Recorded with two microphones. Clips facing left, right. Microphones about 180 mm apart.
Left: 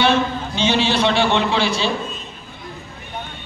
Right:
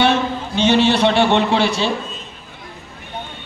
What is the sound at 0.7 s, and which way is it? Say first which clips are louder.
A man's voice: right 4 dB; 55° right (ahead or behind).